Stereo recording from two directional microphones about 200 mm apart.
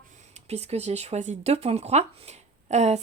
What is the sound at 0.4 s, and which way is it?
Speech, 30° right (ahead or behind).